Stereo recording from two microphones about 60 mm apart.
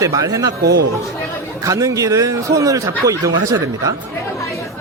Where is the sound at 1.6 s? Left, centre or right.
Right.